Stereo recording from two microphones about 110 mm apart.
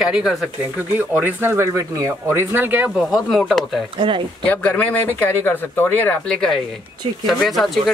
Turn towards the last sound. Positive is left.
turn(degrees=0)  # may be behind; listen again after turning